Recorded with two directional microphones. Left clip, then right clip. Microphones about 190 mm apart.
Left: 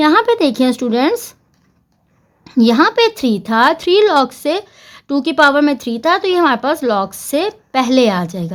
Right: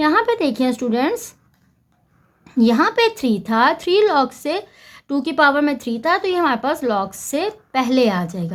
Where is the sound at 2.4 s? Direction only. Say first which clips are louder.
Left 5 dB; 25° left (ahead or behind).